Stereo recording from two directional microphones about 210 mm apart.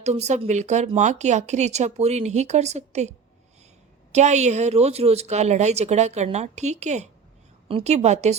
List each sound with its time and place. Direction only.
0.0 s speech: 30° right (ahead or behind)